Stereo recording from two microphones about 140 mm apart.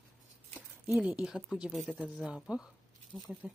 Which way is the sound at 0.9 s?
10° right (ahead or behind).